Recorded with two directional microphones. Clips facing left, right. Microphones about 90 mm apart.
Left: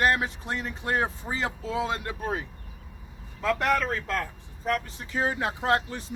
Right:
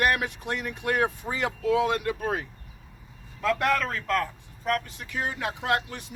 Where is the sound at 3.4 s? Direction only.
20° left (ahead or behind).